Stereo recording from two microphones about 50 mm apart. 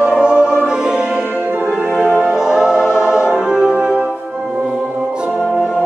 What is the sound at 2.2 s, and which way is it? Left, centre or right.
Music, centre.